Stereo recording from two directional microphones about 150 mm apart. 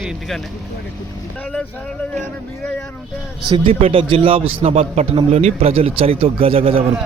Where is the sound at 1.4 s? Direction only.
5° left (ahead or behind).